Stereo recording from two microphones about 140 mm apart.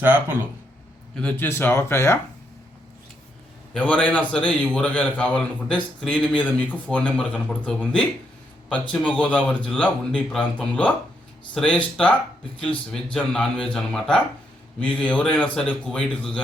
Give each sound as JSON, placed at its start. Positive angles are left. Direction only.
{"t": 0.0, "sound": "speech", "side_deg": -15}
{"t": 1.1, "sound": "a man's voice", "side_deg": 10}
{"t": 3.8, "sound": "a man's voice", "side_deg": 10}